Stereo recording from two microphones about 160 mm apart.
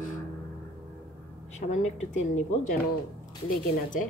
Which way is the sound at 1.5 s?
45° left (ahead or behind).